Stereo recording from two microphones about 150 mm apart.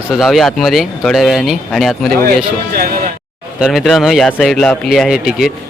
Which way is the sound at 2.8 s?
85° right.